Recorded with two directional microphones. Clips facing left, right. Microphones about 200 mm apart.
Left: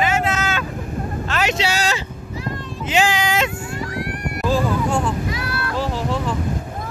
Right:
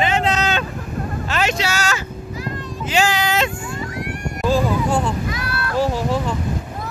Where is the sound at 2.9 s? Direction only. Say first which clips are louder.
Even; 15° left (ahead or behind).